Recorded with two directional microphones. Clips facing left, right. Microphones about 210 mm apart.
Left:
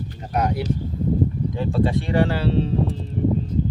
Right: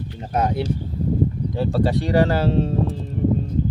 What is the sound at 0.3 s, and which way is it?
Speech, 25° right (ahead or behind).